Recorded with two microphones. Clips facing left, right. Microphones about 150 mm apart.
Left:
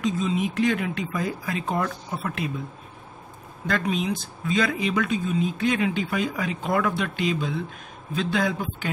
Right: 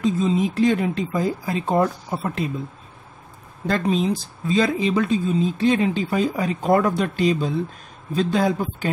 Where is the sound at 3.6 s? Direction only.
35° right (ahead or behind).